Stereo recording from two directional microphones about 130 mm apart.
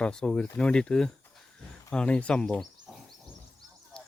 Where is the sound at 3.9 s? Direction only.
5° left (ahead or behind).